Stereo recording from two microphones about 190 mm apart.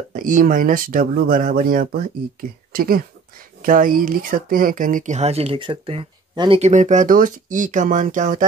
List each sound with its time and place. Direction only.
0.1 s speech: 45° right (ahead or behind); by 6.7 s 25° right (ahead or behind)
6.7 s speech: 40° right (ahead or behind)